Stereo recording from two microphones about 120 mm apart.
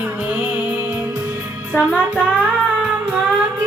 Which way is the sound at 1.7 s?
15° left (ahead or behind).